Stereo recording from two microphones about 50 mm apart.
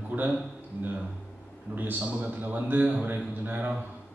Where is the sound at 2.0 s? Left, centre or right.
Right.